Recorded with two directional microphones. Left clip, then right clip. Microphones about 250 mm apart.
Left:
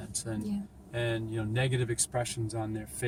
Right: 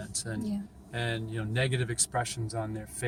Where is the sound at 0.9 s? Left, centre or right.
Centre.